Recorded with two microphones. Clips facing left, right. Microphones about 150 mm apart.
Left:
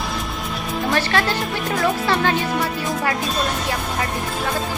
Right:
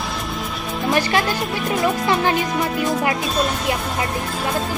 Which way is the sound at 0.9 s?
15° right (ahead or behind).